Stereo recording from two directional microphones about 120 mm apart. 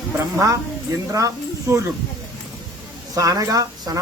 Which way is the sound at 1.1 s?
25° right (ahead or behind).